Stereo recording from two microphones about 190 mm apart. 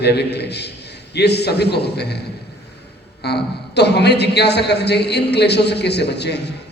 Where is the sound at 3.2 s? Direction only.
60° left (ahead or behind).